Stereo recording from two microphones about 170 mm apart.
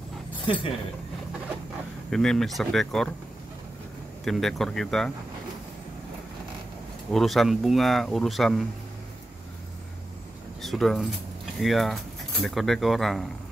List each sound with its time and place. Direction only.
0.5 s speech: 30° left (ahead or behind)
2.0 s speech: 5° left (ahead or behind)
4.2 s speech: centre (ahead or behind)
7.1 s speech: centre (ahead or behind)
10.6 s speech: centre (ahead or behind)